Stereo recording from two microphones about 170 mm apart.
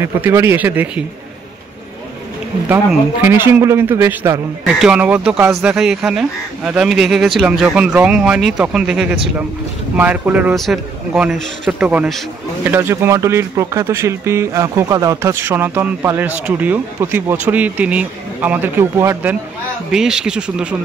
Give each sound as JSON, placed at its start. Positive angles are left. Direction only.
{"t": 0.0, "sound": "speech", "side_deg": -15}
{"t": 2.9, "sound": "speech", "side_deg": -10}
{"t": 4.6, "sound": "speech", "side_deg": -5}
{"t": 19.9, "sound": "speech", "side_deg": -5}